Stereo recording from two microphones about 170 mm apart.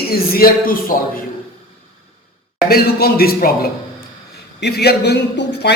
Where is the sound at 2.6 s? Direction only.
65° left (ahead or behind).